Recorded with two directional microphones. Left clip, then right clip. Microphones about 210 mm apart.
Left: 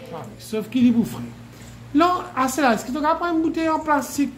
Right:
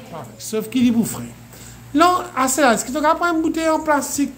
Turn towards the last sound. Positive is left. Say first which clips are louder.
# right 2 dB
turn(degrees=-5)  # may be behind; listen again after turning